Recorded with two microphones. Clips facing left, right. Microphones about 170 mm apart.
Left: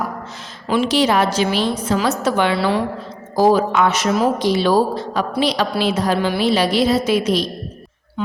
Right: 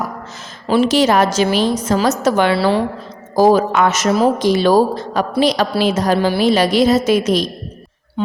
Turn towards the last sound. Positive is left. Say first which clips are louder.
# right 3 dB
turn(degrees=-45)  # may be behind; listen again after turning